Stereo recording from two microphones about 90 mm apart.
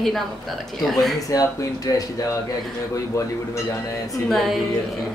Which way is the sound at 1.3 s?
40° left (ahead or behind).